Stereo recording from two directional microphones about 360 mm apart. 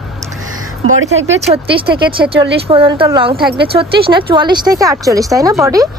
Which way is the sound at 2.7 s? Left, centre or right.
Centre.